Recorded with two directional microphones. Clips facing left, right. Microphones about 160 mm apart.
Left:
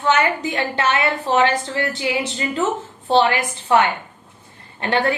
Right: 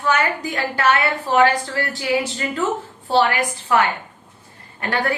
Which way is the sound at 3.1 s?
25° left (ahead or behind).